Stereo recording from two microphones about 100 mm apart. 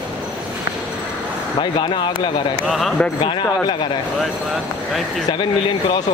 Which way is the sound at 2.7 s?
Centre (ahead or behind).